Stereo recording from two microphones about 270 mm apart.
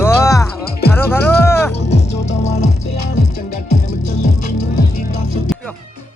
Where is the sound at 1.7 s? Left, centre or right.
Left.